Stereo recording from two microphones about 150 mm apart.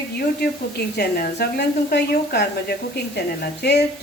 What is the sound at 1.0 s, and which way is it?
Speech, 85° left.